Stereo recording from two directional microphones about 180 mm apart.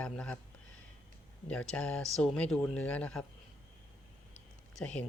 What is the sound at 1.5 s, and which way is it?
Speech, 5° left (ahead or behind).